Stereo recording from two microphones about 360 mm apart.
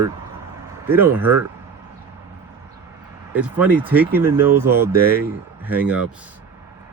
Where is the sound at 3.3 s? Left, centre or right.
Centre.